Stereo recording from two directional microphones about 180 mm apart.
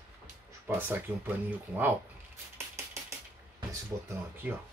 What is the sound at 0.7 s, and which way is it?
Speech, 10° right (ahead or behind).